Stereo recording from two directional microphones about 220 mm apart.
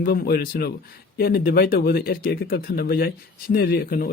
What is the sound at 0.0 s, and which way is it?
Speech, 45° left (ahead or behind).